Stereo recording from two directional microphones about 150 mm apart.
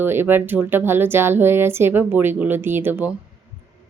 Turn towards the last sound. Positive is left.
turn(degrees=-15)  # may be behind; listen again after turning